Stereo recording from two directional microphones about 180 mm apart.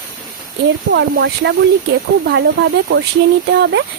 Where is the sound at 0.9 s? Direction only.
70° right (ahead or behind).